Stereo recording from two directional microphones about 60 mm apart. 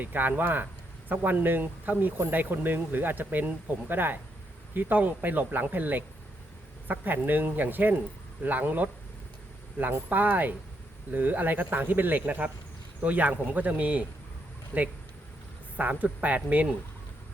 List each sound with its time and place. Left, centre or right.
0.0 s speech: right